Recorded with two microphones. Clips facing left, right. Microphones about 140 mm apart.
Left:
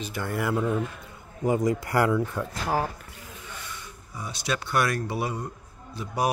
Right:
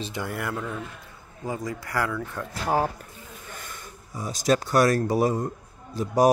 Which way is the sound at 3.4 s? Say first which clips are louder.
Even; 45° right (ahead or behind).